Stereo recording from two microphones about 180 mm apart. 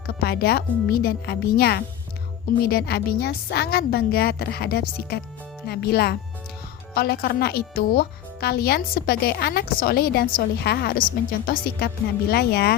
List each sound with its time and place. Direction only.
0.1 s speech: 60° left (ahead or behind)